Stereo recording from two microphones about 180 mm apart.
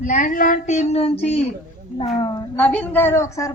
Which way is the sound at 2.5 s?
10° left (ahead or behind).